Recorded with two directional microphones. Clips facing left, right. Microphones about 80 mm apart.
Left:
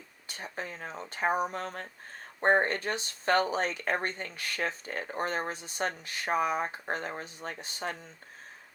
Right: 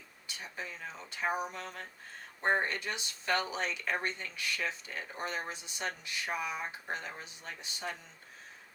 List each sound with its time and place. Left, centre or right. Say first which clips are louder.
0.3 s speech: left 4 dB; left